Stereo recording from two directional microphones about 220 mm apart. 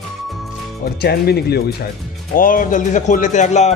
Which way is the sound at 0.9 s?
45° left (ahead or behind).